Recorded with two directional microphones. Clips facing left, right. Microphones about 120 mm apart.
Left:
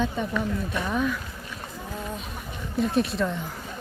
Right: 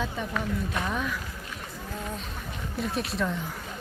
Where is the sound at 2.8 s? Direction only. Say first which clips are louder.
Left 6 dB; centre (ahead or behind).